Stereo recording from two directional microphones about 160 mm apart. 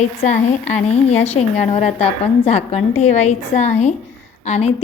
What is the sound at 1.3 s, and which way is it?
A woman's voice, 40° left (ahead or behind).